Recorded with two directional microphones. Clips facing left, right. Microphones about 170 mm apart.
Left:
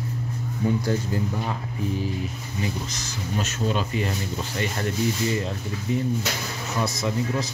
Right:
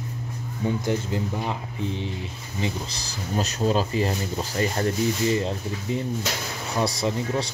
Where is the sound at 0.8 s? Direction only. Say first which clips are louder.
Even; 15° right (ahead or behind).